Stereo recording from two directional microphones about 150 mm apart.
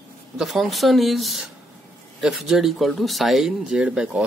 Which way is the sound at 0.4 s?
Centre (ahead or behind).